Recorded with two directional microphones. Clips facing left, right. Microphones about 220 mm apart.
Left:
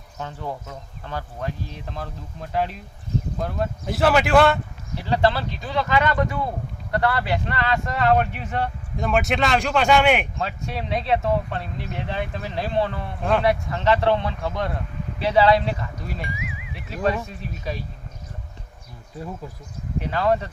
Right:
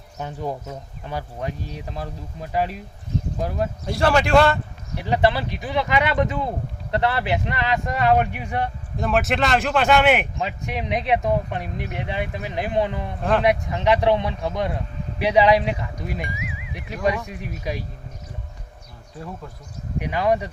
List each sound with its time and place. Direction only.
0.2 s speech: 15° right (ahead or behind)
3.8 s speech: 5° left (ahead or behind)
4.9 s speech: 15° right (ahead or behind)
9.0 s speech: centre (ahead or behind)
10.3 s speech: 15° right (ahead or behind)
16.3 s music: centre (ahead or behind)
16.7 s speech: 15° right (ahead or behind)
20.0 s speech: 15° right (ahead or behind)